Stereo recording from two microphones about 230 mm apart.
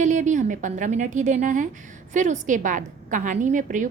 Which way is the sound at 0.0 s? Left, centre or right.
Right.